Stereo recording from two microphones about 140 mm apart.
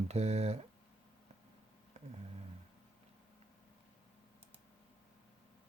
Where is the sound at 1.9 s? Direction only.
55° right (ahead or behind).